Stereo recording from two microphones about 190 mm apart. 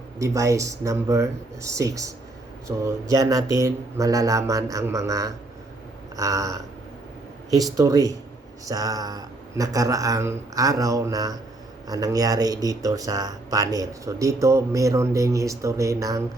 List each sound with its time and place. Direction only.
0.2 s speech: 15° right (ahead or behind)